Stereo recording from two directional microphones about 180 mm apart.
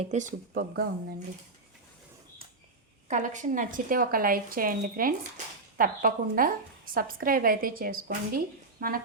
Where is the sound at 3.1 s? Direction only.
45° right (ahead or behind).